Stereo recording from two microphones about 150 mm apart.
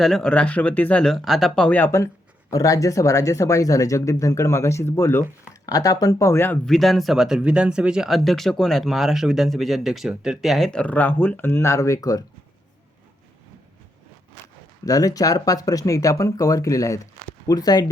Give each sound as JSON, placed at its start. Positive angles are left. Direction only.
{"t": 0.0, "sound": "speech", "side_deg": 5}
{"t": 6.7, "sound": "speech", "side_deg": 0}
{"t": 14.8, "sound": "speech", "side_deg": 25}